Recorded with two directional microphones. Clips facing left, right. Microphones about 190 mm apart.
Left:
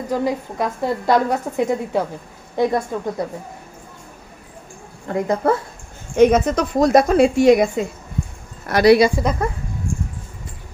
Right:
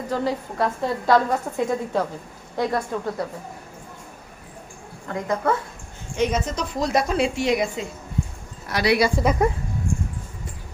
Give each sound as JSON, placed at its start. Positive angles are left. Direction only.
{"t": 0.1, "sound": "a woman's voice", "side_deg": 15}
{"t": 5.0, "sound": "a woman's voice", "side_deg": 35}
{"t": 6.1, "sound": "a woman's voice", "side_deg": 55}
{"t": 9.2, "sound": "speech", "side_deg": 5}